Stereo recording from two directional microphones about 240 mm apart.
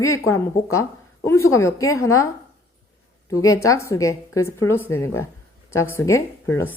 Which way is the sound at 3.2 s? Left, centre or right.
Centre.